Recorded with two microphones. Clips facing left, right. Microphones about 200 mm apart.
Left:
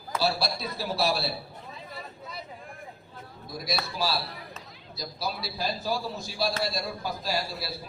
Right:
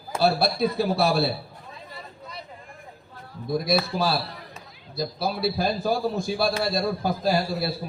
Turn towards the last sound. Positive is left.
turn(degrees=-55)  # may be behind; listen again after turning